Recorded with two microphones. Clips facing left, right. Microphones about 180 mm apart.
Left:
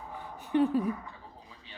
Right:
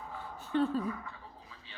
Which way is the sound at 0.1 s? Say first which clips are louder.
Left 4 dB; 15° left (ahead or behind).